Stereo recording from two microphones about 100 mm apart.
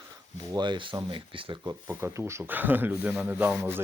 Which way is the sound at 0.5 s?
50° right (ahead or behind).